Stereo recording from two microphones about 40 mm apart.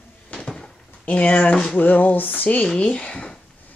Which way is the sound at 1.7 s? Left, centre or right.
Left.